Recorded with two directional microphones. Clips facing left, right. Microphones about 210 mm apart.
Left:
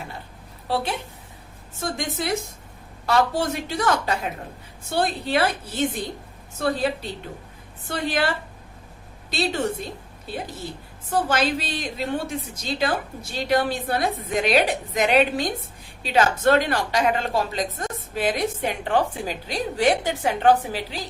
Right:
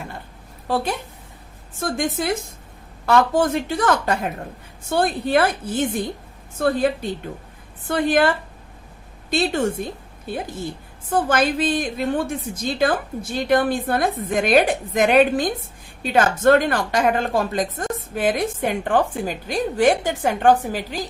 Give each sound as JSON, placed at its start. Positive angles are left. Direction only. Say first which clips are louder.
{"t": 2.0, "sound": "a woman's voice", "louder": "right 4 dB", "side_deg": -50}
{"t": 9.3, "sound": "a woman's voice", "louder": "right 4 dB", "side_deg": -50}
{"t": 11.1, "sound": "a woman's voice", "louder": "right 3 dB", "side_deg": -50}